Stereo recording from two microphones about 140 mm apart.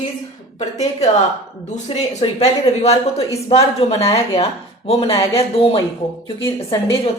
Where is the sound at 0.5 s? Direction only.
55° left (ahead or behind).